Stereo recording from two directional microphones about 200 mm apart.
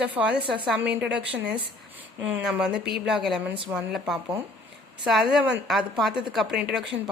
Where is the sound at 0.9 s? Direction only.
60° right (ahead or behind).